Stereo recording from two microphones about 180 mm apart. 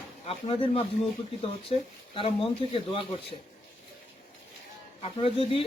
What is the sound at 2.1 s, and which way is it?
Speech, 30° left (ahead or behind).